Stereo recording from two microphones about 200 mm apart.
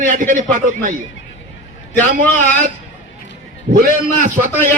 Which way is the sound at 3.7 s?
45° right (ahead or behind).